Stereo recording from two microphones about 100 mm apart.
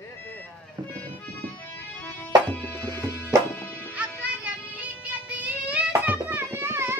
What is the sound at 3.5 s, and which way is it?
Music, 20° left (ahead or behind).